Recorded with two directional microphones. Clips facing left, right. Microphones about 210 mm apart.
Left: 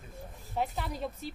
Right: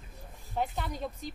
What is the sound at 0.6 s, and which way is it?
Speech, centre (ahead or behind).